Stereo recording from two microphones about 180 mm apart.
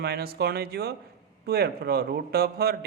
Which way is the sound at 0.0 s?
60° right (ahead or behind).